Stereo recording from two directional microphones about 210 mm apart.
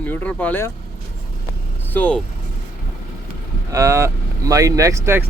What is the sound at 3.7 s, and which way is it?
Speech, 15° right (ahead or behind).